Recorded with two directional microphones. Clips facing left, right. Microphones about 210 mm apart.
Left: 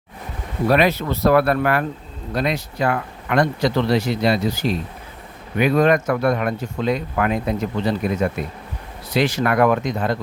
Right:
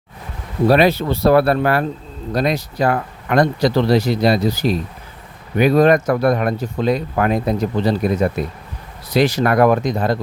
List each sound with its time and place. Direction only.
0.7 s speech: 30° right (ahead or behind)